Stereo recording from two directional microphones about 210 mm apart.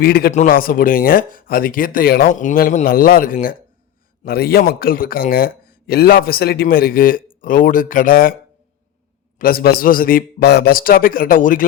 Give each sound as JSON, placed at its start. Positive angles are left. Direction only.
{"t": 0.0, "sound": "a man's voice", "side_deg": 45}
{"t": 9.4, "sound": "a man's voice", "side_deg": 45}